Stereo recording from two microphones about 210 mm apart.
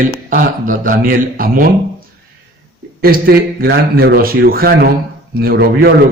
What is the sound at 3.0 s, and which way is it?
A man's voice, 45° right (ahead or behind).